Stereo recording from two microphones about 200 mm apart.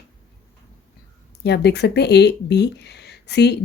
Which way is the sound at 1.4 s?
55° left (ahead or behind).